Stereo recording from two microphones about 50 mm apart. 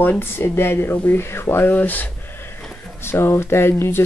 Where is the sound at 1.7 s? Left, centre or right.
Left.